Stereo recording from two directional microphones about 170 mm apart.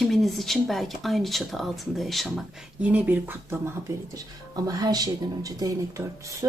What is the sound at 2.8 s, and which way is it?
Speech, 10° right (ahead or behind).